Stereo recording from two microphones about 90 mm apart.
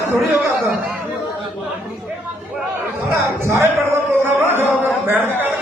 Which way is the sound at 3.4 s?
30° right (ahead or behind).